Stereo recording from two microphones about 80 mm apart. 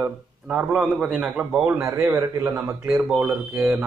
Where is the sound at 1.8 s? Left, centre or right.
Right.